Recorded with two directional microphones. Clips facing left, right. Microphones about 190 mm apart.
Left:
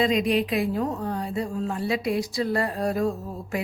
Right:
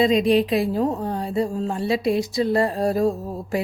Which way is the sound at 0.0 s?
25° right (ahead or behind).